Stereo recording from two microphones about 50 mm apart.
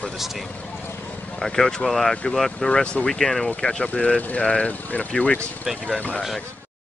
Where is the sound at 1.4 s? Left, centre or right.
Centre.